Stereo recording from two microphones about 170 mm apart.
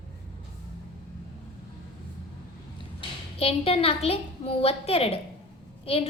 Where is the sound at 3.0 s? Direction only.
35° left (ahead or behind).